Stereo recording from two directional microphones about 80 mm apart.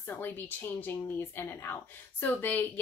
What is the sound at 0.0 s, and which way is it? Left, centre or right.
Speech, left.